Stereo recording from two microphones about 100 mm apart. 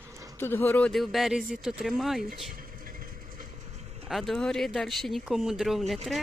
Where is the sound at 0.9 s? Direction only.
Centre (ahead or behind).